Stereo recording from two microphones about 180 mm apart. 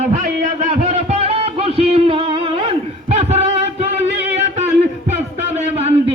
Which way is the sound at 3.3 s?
35° right (ahead or behind).